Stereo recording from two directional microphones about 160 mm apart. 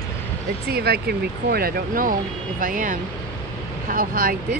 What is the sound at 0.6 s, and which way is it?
Speech, 80° right.